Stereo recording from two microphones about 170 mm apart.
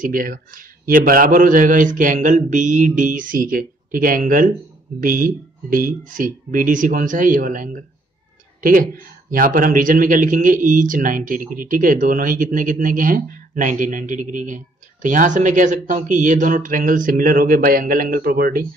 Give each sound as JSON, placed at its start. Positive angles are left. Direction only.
{"t": 0.0, "sound": "speech", "side_deg": -55}
{"t": 9.3, "sound": "speech", "side_deg": -55}